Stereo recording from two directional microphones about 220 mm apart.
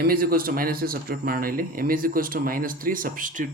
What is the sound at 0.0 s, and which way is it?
Speech, 40° right (ahead or behind).